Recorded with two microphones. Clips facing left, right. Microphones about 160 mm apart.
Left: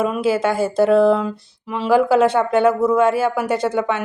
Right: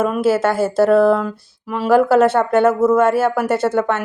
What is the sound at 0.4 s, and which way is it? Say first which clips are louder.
Speech: right 2 dB; 15° left (ahead or behind).